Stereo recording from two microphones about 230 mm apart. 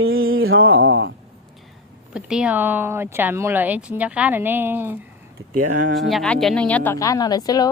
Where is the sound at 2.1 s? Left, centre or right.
Centre.